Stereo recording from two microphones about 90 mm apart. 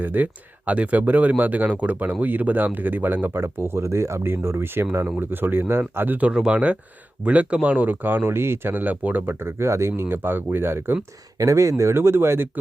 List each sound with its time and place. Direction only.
0.0 s speech: 20° right (ahead or behind)
11.3 s speech: 35° right (ahead or behind)